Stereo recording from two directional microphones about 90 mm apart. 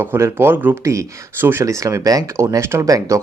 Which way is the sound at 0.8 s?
35° right (ahead or behind).